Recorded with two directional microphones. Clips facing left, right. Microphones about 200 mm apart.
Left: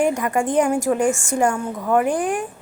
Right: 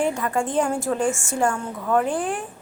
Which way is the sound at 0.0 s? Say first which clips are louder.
Left 3 dB; 15° left (ahead or behind).